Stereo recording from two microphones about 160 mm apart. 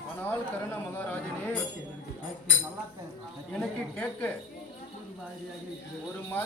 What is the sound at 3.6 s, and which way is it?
Speech, 10° left (ahead or behind).